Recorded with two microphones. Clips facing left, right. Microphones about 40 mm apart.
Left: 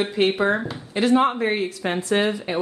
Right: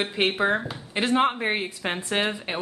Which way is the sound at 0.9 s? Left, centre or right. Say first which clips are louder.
Left 4 dB; right.